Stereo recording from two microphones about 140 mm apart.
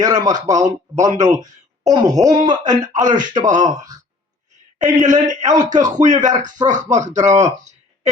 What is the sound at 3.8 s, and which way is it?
Speech, 25° right (ahead or behind).